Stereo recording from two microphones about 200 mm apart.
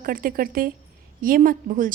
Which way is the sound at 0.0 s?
45° right (ahead or behind).